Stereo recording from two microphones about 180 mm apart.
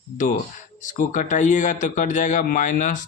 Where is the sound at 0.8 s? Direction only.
45° left (ahead or behind).